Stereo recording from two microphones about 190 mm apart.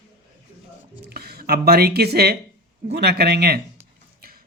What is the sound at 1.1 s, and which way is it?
Speech, 55° right (ahead or behind).